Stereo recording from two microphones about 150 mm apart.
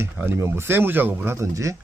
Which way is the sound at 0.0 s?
15° right (ahead or behind).